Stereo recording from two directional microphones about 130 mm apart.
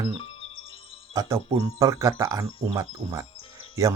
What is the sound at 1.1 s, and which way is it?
Speech, 25° right (ahead or behind).